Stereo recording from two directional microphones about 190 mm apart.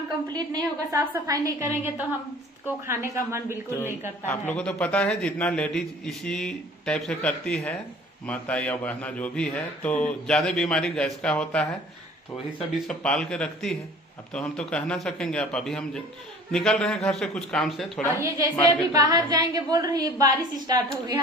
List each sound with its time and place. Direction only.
0.3 s a woman's voice: 20° right (ahead or behind)
4.3 s a man's voice: 5° left (ahead or behind)
12.8 s a man's voice: 5° left (ahead or behind)
18.2 s a woman's voice: 20° right (ahead or behind)